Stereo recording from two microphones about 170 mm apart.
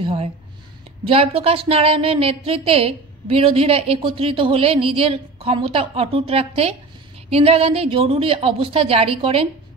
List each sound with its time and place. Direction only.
0.0 s a woman's voice: 35° right (ahead or behind)